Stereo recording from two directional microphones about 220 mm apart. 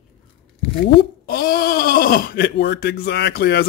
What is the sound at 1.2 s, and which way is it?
Speech, 45° left (ahead or behind).